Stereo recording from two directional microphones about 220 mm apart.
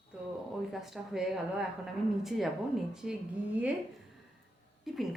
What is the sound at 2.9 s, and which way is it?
Speech, centre (ahead or behind).